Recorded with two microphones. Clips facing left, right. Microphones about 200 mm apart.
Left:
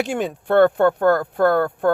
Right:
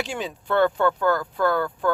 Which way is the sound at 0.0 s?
55° left (ahead or behind).